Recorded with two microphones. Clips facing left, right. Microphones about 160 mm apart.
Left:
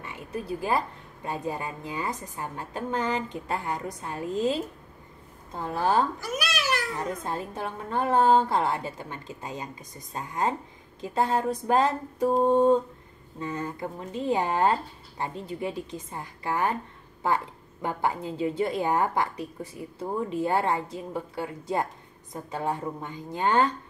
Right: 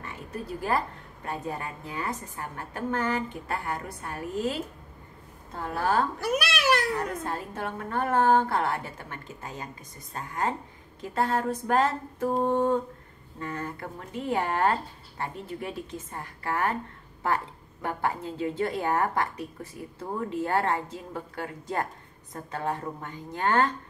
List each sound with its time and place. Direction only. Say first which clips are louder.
0.0 s a woman's voice: left 2 dB; 15° left (ahead or behind)
6.1 s speech: right 3 dB; 65° right (ahead or behind)
7.0 s a woman's voice: even; 20° left (ahead or behind)
17.8 s a woman's voice: left 2 dB; 15° left (ahead or behind)